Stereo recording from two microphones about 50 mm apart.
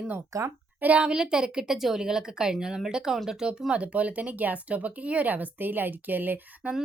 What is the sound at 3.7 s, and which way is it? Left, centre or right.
A woman's voice, right.